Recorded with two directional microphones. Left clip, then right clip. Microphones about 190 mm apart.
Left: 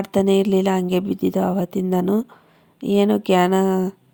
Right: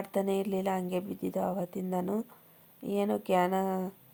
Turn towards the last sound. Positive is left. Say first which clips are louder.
# left 11 dB
turn(degrees=35)  # may be behind; listen again after turning